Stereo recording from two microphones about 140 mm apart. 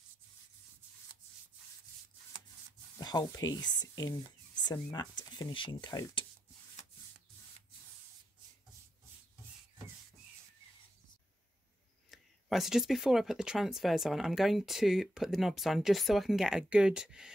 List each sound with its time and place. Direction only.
3.0 s speech: 30° left (ahead or behind)
12.1 s speech: centre (ahead or behind)